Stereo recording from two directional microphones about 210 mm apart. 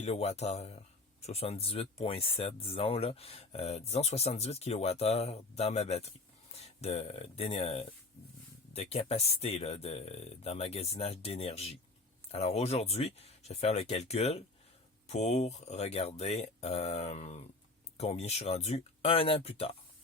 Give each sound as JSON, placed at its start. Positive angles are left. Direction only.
{"t": 0.0, "sound": "speech", "side_deg": 30}